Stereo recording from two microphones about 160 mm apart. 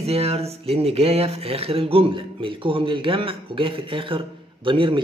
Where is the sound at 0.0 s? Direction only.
40° right (ahead or behind).